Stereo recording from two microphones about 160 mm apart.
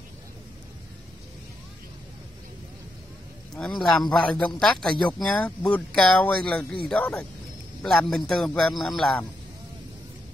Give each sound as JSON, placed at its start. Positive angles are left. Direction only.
{"t": 3.5, "sound": "speech", "side_deg": 5}